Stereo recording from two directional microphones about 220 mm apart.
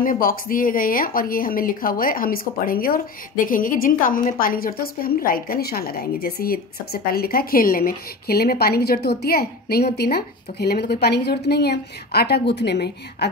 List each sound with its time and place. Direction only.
0.0 s a woman's voice: 40° left (ahead or behind)